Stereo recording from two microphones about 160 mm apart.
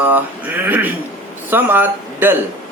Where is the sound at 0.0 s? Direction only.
10° right (ahead or behind).